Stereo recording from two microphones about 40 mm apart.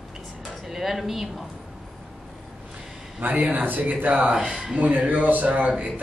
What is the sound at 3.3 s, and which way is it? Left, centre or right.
Speech, right.